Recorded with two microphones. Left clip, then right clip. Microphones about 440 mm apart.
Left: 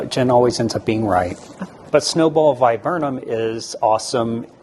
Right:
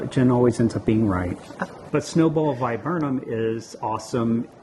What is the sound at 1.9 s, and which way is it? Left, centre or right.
A man's voice, left.